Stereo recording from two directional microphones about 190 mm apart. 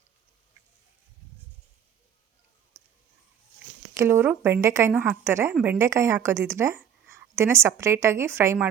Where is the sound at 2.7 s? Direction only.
15° right (ahead or behind).